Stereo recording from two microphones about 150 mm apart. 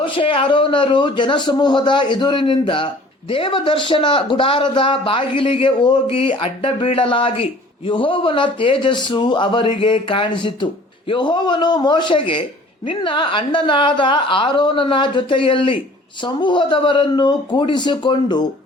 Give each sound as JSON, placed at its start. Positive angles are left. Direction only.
{"t": 0.0, "sound": "speech", "side_deg": 35}